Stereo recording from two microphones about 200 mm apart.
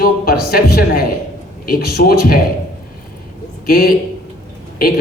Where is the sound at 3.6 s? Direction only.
50° left (ahead or behind).